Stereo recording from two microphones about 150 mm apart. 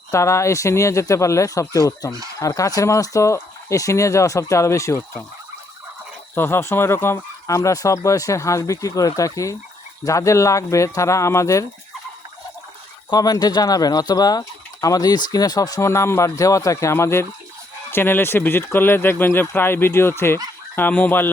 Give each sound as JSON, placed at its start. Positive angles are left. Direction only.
{"t": 0.1, "sound": "speech", "side_deg": 20}
{"t": 6.3, "sound": "speech", "side_deg": 15}
{"t": 13.1, "sound": "speech", "side_deg": 25}